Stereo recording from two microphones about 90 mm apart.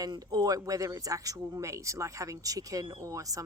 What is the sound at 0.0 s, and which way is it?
Speech, 45° right (ahead or behind).